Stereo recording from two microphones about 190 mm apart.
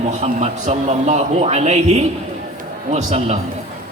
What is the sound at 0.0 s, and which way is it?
A man's voice, 40° right (ahead or behind).